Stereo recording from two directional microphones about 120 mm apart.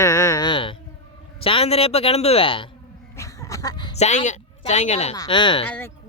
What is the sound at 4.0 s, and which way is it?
Speech, 80° left.